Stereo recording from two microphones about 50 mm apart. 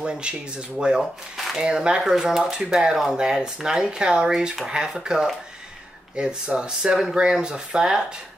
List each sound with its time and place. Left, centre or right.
0.0 s speech: centre